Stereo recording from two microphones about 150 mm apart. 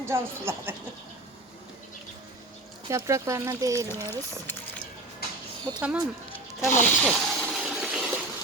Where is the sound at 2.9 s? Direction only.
20° right (ahead or behind).